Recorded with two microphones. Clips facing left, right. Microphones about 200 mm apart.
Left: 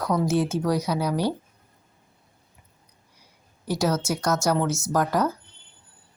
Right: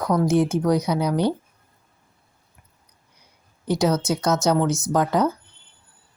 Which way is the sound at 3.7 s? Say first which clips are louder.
Right 3 dB; 20° right (ahead or behind).